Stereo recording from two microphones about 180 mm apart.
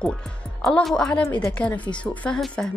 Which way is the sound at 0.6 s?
Centre (ahead or behind).